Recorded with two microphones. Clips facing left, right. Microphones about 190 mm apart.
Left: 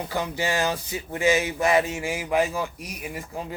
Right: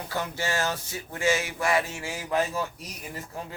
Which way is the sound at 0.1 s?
15° left (ahead or behind).